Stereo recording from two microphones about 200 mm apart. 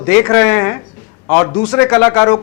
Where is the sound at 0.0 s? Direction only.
15° left (ahead or behind).